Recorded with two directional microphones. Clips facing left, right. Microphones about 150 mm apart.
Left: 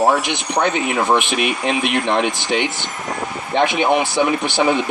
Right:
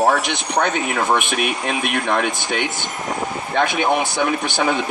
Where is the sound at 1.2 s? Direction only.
50° right (ahead or behind).